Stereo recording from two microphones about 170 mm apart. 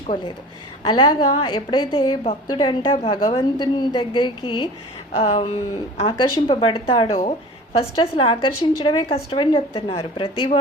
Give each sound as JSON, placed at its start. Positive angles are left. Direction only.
{"t": 0.9, "sound": "a woman's voice", "side_deg": 25}